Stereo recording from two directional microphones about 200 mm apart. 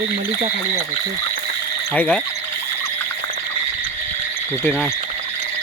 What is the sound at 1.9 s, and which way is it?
Speech, 5° left (ahead or behind).